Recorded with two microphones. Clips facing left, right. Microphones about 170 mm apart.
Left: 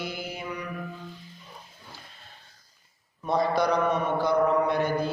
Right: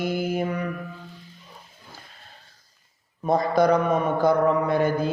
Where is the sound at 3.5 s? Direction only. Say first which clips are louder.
Right 5 dB; 50° right (ahead or behind).